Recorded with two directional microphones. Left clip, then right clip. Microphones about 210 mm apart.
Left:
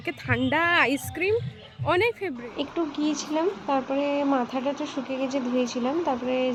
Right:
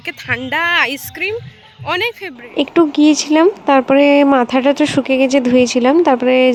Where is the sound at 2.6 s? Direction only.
50° right (ahead or behind).